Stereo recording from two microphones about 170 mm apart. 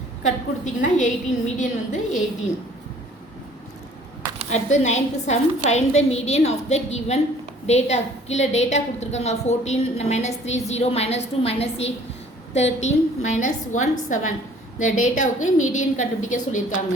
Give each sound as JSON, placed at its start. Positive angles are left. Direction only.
{"t": 0.2, "sound": "a woman's voice", "side_deg": 45}
{"t": 4.5, "sound": "a woman's voice", "side_deg": 45}